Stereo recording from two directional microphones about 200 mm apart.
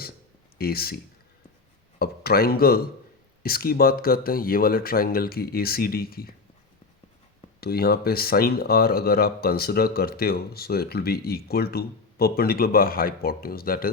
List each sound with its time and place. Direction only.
0.6 s speech: 50° left (ahead or behind)
2.0 s speech: 50° left (ahead or behind)
7.6 s speech: 50° left (ahead or behind)